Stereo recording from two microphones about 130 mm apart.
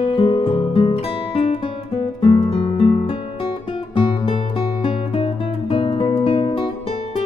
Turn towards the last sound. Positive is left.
turn(degrees=45)  # may be behind; listen again after turning